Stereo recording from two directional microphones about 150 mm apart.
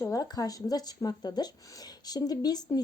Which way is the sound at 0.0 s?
25° left (ahead or behind).